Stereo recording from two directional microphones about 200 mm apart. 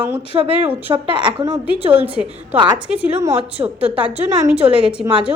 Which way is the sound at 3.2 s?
15° right (ahead or behind).